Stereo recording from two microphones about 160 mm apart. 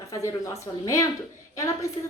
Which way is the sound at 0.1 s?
20° left (ahead or behind).